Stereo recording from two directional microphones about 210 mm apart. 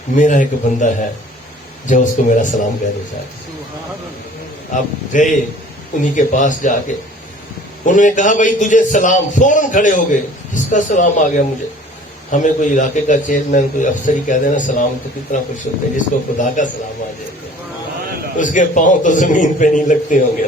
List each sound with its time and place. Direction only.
0.2 s a man's voice: 35° left (ahead or behind)
4.7 s a man's voice: 35° left (ahead or behind)
7.9 s a man's voice: 35° left (ahead or behind)
18.3 s a man's voice: 40° left (ahead or behind)